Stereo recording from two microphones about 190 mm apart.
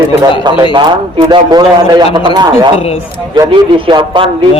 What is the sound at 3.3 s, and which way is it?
Speech, 25° right (ahead or behind).